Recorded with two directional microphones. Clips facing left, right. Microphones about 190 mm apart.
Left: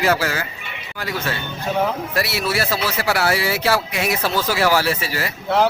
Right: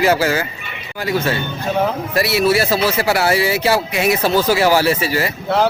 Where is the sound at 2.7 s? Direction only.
25° right (ahead or behind).